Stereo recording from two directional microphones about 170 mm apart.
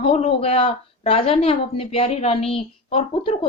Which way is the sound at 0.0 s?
35° left (ahead or behind).